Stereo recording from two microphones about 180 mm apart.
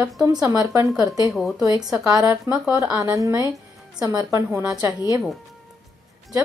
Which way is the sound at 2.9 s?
20° right (ahead or behind).